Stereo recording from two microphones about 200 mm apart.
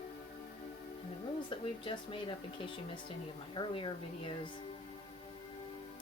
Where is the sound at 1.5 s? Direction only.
25° left (ahead or behind).